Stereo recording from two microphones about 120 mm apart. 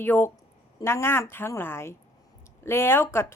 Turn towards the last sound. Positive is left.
turn(degrees=20)  # may be behind; listen again after turning